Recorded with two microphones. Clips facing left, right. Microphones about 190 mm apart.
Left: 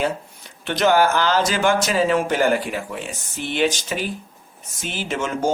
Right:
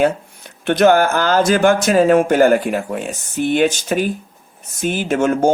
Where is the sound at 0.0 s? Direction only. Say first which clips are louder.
Right 7 dB; 55° right (ahead or behind).